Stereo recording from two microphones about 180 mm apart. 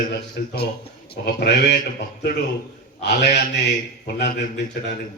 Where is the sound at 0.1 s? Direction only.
65° left (ahead or behind).